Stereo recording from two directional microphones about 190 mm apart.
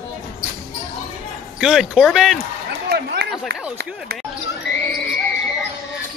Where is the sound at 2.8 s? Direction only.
55° right (ahead or behind).